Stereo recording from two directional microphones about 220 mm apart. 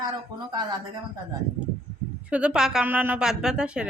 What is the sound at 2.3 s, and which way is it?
A woman's voice, 5° right (ahead or behind).